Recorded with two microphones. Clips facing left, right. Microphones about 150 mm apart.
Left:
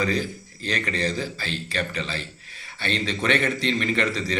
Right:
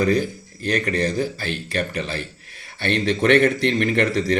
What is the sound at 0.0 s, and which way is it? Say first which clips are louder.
A man's voice: right 6 dB; 50° right (ahead or behind).